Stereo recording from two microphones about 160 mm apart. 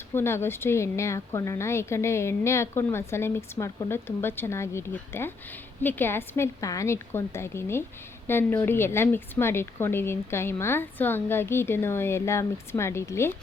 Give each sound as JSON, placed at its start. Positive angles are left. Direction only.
{"t": 0.1, "sound": "a woman's voice", "side_deg": 15}